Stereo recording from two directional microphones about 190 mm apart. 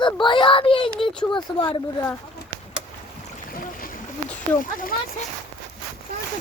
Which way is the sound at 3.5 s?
50° left (ahead or behind).